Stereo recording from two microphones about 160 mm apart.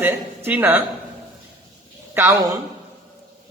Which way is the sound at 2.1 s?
15° right (ahead or behind).